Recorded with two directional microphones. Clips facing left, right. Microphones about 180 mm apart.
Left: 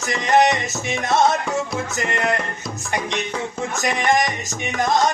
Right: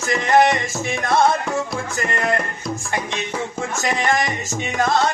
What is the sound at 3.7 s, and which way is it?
Music, 15° left (ahead or behind).